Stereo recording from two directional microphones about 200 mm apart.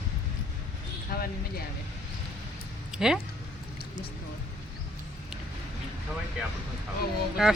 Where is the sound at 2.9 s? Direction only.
5° right (ahead or behind).